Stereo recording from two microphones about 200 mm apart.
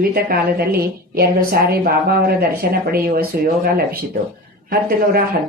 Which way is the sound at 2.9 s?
50° right (ahead or behind).